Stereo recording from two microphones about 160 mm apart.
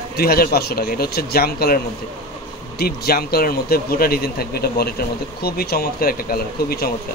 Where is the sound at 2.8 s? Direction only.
75° left (ahead or behind).